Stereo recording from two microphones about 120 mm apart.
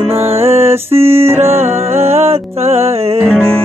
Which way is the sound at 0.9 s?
55° right (ahead or behind).